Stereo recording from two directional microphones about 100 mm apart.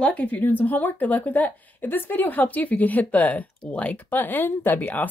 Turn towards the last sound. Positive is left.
turn(degrees=20)  # may be behind; listen again after turning